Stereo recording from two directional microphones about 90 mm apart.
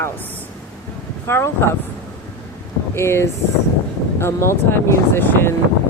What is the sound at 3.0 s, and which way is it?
Speech, 30° left (ahead or behind).